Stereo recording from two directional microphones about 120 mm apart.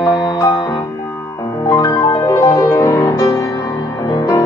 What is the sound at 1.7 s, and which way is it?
Music, 35° left (ahead or behind).